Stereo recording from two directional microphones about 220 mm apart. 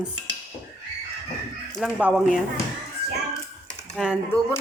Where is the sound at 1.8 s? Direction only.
5° right (ahead or behind).